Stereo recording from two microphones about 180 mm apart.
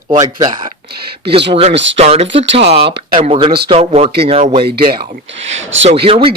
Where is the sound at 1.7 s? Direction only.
85° right.